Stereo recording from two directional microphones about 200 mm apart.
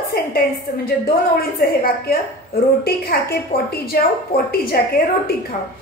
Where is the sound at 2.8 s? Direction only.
50° left (ahead or behind).